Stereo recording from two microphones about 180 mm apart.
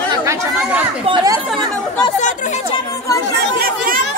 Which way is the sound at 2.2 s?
45° left (ahead or behind).